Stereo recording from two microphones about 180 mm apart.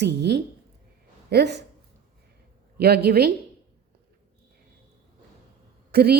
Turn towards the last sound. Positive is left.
turn(degrees=-60)  # may be behind; listen again after turning